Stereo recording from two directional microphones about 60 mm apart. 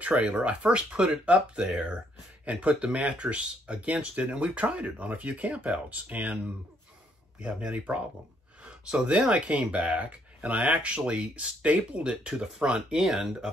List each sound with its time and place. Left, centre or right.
0.0 s speech: centre
7.4 s speech: centre
8.6 s a sound: centre
9.3 s speech: centre